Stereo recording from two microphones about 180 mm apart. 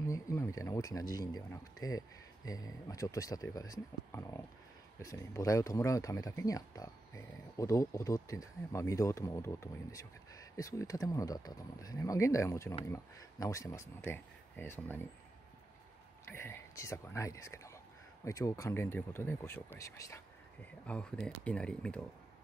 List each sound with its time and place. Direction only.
0.0 s speech: 15° left (ahead or behind)
16.3 s speech: 15° left (ahead or behind)
20.8 s speech: 5° left (ahead or behind)